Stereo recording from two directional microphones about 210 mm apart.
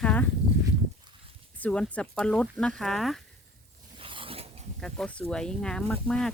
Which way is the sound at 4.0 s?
25° right (ahead or behind).